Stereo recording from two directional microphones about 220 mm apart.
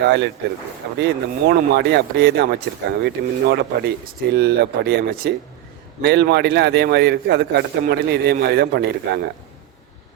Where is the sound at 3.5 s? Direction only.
50° right (ahead or behind).